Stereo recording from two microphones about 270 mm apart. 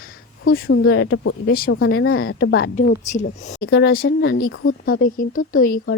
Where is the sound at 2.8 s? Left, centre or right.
Left.